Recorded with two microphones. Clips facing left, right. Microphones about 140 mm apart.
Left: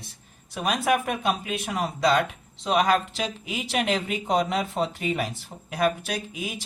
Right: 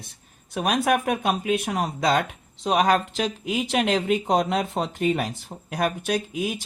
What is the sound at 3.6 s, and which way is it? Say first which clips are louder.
Speech: right 3 dB; 40° right (ahead or behind).